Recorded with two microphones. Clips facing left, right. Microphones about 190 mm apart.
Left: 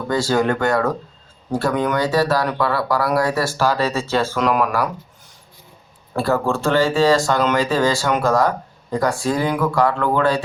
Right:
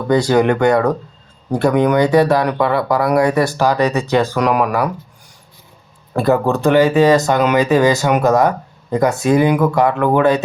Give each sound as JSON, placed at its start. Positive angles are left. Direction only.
{"t": 0.1, "sound": "speech", "side_deg": -20}
{"t": 6.1, "sound": "speech", "side_deg": -20}